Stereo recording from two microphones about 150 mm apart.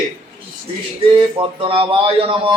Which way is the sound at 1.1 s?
35° right (ahead or behind).